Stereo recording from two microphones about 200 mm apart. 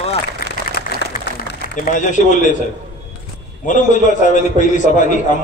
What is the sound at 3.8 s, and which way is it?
A man's voice, 40° left (ahead or behind).